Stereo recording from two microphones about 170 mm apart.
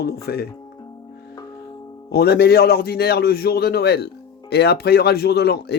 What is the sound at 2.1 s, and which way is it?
Speech, 70° left (ahead or behind).